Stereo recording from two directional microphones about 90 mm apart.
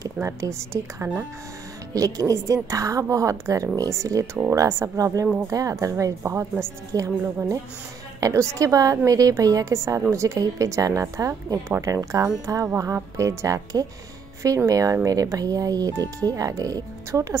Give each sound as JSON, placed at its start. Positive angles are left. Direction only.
{"t": 0.0, "sound": "speech", "side_deg": -35}